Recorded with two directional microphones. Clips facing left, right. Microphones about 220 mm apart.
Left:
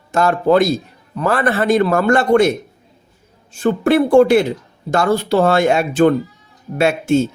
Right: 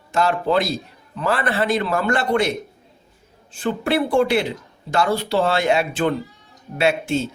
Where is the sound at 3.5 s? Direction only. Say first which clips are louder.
Left 7 dB; 45° left (ahead or behind).